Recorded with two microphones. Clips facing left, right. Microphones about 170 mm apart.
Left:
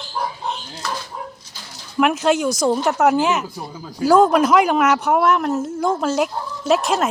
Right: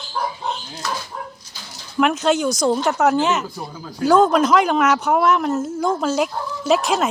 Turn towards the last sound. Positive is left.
turn(degrees=0)  # may be behind; listen again after turning